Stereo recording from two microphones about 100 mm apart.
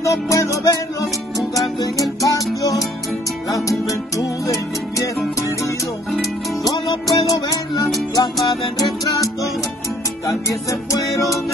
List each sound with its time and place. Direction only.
0.0 s music: 30° left (ahead or behind)
1.8 s music: 35° left (ahead or behind)
3.4 s music: 35° left (ahead or behind)
6.6 s music: 40° left (ahead or behind)